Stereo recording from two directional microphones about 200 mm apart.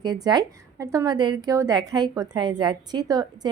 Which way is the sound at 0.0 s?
20° right (ahead or behind).